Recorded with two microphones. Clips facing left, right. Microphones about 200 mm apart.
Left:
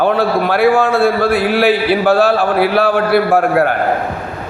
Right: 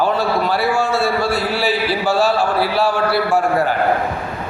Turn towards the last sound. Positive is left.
turn(degrees=55)  # may be behind; listen again after turning